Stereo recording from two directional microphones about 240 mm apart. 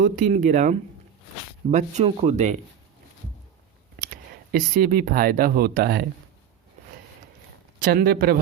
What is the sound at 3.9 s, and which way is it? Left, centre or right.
Speech, right.